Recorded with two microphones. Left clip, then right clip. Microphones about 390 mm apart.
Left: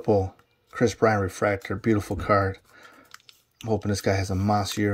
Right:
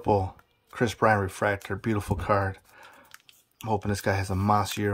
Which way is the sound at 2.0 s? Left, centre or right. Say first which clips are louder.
Left 1 dB; right.